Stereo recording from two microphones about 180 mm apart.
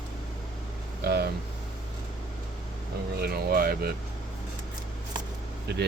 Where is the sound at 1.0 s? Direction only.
65° right (ahead or behind).